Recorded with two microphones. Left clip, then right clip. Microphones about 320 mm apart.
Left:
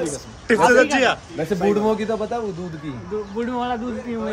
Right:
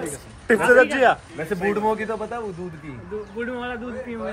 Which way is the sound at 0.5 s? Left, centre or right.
Right.